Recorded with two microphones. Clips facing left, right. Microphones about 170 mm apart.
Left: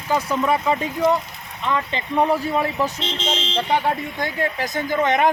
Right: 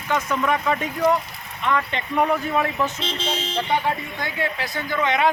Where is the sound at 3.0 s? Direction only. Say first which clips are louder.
Left 1 dB; 10° right (ahead or behind).